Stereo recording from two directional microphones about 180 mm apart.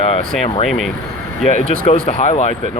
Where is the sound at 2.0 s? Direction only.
35° left (ahead or behind).